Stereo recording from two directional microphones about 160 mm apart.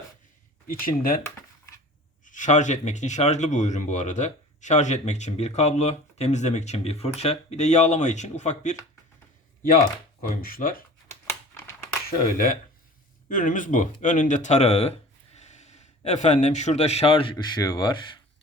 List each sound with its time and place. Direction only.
0.7 s speech: 65° left (ahead or behind)
2.2 s speech: 50° left (ahead or behind)
10.2 s speech: 65° left (ahead or behind)
12.1 s speech: 65° left (ahead or behind); by 17.3 s 35° left (ahead or behind)
17.3 s speech: 20° left (ahead or behind)